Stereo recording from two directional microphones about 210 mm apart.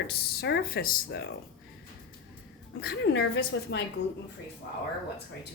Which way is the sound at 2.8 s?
50° left (ahead or behind).